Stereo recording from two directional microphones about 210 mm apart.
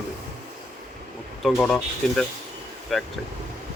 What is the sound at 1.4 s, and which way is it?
Speech, centre (ahead or behind).